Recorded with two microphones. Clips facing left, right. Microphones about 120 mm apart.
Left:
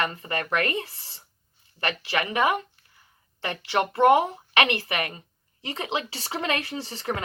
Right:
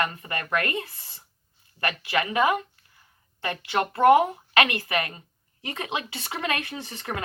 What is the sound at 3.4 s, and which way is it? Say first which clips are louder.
A woman's voice: left 1 dB; 30° left (ahead or behind).